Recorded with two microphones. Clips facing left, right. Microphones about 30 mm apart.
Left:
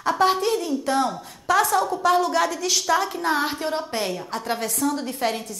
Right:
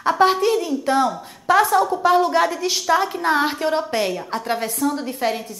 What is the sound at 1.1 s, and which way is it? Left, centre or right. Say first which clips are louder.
A woman's voice: right 4 dB; centre.